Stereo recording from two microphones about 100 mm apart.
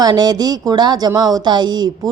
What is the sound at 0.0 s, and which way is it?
Speech, 40° right (ahead or behind).